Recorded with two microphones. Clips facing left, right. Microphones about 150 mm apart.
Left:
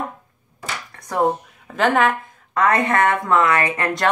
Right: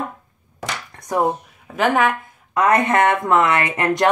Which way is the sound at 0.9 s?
15° right (ahead or behind).